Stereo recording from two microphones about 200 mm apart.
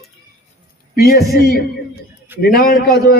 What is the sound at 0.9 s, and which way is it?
A man's voice, 50° left (ahead or behind).